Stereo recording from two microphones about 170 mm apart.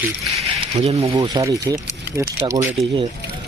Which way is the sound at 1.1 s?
20° right (ahead or behind).